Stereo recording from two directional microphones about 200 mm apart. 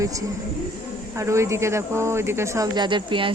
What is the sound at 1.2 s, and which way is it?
Speech, 15° right (ahead or behind).